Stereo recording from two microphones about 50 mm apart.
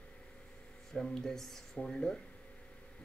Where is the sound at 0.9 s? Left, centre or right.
Centre.